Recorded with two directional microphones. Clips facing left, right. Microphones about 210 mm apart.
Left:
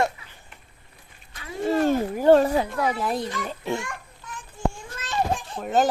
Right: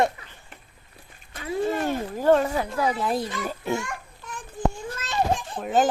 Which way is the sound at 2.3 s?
35° left (ahead or behind).